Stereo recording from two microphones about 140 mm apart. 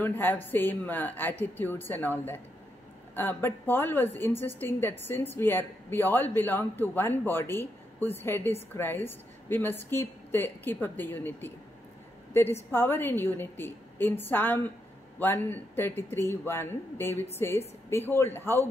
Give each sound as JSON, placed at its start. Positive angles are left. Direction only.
{"t": 0.0, "sound": "a woman's voice", "side_deg": 15}
{"t": 12.7, "sound": "a woman's voice", "side_deg": 15}